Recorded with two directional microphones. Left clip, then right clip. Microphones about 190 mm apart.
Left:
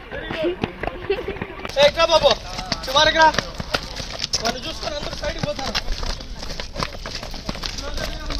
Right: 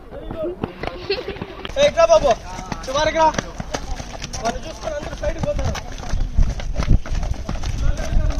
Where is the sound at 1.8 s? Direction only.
20° left (ahead or behind).